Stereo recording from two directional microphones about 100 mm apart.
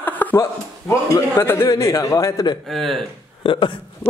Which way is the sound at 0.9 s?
30° left (ahead or behind).